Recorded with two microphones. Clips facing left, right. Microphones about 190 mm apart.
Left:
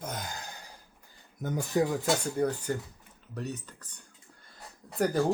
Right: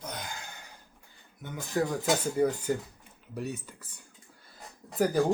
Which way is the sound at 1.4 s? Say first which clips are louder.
Left 8 dB; 40° left (ahead or behind).